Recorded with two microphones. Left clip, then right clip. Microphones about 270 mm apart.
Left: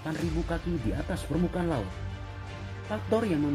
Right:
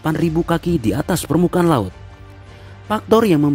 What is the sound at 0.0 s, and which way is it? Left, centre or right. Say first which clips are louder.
Speech: right 14 dB; right.